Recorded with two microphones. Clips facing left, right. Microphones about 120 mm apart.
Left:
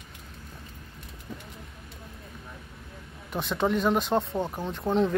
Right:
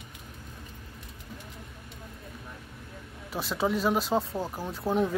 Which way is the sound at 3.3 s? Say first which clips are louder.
Left 2 dB; 5° right (ahead or behind).